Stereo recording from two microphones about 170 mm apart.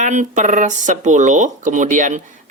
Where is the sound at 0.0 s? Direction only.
45° right (ahead or behind).